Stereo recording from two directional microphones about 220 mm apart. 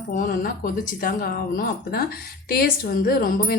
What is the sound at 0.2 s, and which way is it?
A woman's voice, 40° left (ahead or behind).